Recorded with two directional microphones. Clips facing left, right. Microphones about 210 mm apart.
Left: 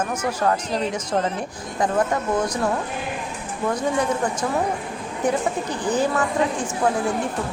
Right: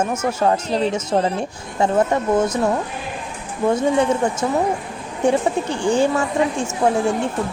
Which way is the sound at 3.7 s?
25° right (ahead or behind).